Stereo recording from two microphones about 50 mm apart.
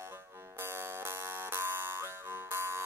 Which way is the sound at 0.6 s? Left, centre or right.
Right.